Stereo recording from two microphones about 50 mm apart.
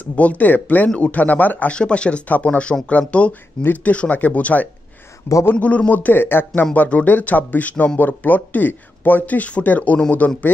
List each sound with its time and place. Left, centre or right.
0.0 s speech: left
1.7 s speech: left
5.3 s speech: left
5.6 s speech: left
5.9 s speech: left
6.6 s speech: left